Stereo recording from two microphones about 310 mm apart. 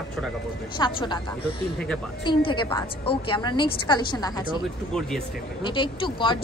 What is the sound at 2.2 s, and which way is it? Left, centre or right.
A woman's voice, centre.